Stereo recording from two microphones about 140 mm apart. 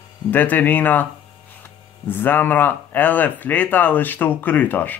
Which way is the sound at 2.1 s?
15° left (ahead or behind).